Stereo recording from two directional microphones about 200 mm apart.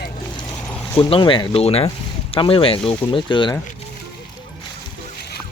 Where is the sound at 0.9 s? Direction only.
25° left (ahead or behind).